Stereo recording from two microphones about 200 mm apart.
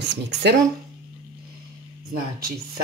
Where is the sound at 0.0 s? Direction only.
60° right (ahead or behind).